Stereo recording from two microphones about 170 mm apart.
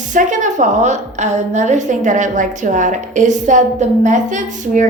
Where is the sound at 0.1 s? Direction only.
45° right (ahead or behind).